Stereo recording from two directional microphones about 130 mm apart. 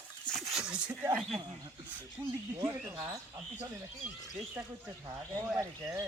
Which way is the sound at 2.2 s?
20° right (ahead or behind).